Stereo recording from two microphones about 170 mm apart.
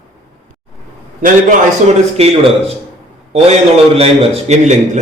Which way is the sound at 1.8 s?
35° right (ahead or behind).